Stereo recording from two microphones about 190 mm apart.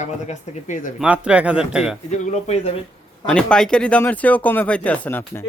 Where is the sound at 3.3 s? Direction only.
5° left (ahead or behind).